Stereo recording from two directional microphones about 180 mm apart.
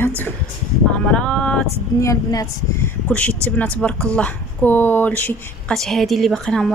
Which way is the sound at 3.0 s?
10° left (ahead or behind).